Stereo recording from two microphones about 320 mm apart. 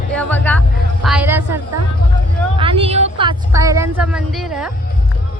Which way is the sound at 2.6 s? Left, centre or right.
Centre.